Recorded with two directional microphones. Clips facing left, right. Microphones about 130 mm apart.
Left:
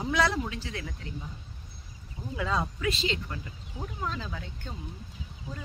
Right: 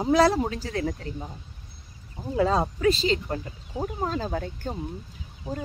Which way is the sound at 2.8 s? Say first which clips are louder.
Right 8 dB; 35° right (ahead or behind).